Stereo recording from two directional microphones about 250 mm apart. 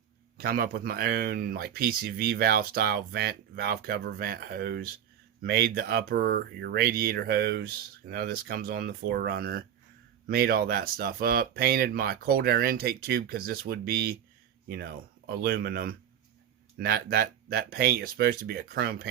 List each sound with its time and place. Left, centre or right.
0.3 s speech: right